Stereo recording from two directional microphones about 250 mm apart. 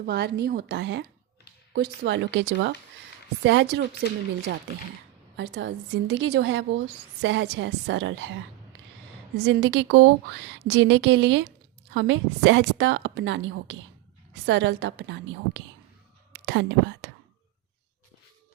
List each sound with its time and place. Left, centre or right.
0.0 s a woman's voice: right
5.4 s a woman's voice: right
9.3 s a woman's voice: right